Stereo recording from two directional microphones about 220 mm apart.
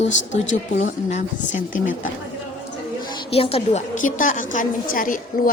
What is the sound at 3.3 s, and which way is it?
A woman's voice, 25° left (ahead or behind).